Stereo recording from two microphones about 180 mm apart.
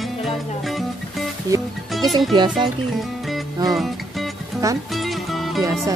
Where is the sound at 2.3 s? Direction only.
25° right (ahead or behind).